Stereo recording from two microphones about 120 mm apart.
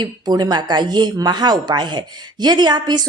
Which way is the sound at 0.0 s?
35° right (ahead or behind).